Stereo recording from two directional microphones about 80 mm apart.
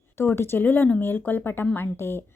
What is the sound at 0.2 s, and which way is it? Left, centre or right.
Speech, left.